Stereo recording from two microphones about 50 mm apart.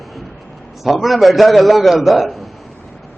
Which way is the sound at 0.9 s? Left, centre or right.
Centre.